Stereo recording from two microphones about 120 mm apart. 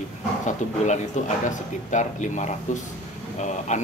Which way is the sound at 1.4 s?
90° left.